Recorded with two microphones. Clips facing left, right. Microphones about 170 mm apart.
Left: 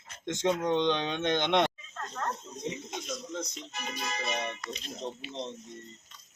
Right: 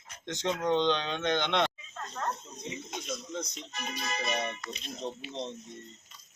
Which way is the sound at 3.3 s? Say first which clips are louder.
Even; centre (ahead or behind).